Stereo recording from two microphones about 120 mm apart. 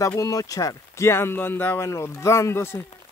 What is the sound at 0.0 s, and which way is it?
Speech, 25° left (ahead or behind).